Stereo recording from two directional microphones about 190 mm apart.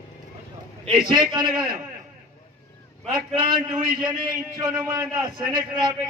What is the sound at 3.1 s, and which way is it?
A man's voice, 25° right (ahead or behind).